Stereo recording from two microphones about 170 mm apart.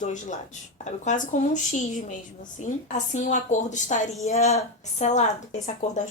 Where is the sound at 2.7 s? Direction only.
45° left (ahead or behind).